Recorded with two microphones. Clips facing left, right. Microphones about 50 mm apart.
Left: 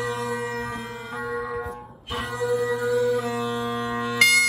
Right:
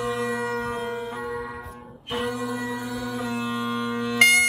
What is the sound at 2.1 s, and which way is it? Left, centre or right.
Music, centre.